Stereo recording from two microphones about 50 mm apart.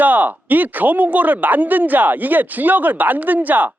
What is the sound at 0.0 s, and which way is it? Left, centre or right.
Speech, right.